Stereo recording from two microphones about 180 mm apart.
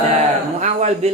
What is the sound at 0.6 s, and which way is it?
Speech, 40° right (ahead or behind).